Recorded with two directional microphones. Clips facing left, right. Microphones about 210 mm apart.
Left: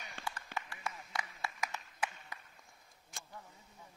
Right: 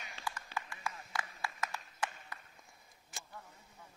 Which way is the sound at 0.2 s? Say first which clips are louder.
Even; 50° left (ahead or behind).